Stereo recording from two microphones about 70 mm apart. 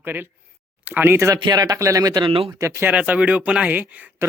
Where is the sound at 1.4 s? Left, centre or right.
Right.